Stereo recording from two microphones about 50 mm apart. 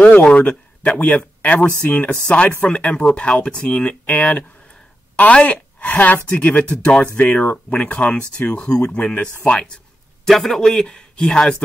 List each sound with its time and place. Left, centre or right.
0.0 s speech: left
2.2 s a woman's voice: left
7.0 s speech: left
10.2 s a man's voice: centre